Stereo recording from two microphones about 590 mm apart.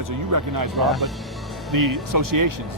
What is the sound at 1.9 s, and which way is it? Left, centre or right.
Speech, right.